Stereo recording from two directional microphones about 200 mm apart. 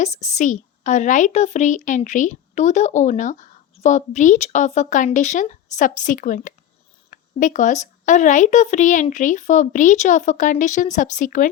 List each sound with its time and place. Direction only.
0.0 s a woman's voice: 35° left (ahead or behind)